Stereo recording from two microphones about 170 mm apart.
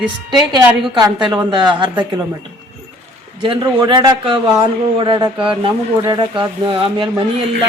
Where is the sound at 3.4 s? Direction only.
25° right (ahead or behind).